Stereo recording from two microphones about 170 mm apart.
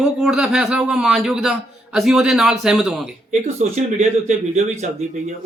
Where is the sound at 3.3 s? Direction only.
45° right (ahead or behind).